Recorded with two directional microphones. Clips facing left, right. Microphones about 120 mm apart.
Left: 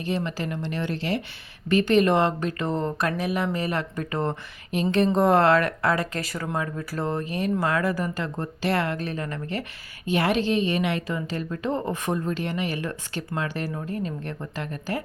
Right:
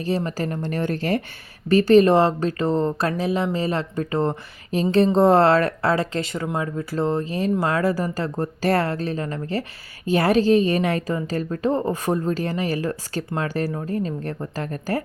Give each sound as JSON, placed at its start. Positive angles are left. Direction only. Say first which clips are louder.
{"t": 0.3, "sound": "a woman's voice", "louder": "right 4 dB", "side_deg": -40}